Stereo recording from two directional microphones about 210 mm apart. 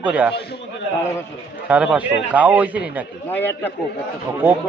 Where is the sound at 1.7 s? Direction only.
5° right (ahead or behind).